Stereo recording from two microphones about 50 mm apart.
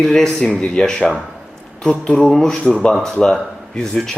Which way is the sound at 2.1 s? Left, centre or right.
Centre.